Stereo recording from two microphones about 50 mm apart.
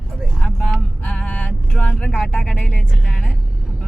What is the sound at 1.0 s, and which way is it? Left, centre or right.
Speech, left.